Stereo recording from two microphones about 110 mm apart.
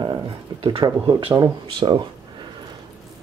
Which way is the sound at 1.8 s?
50° right (ahead or behind).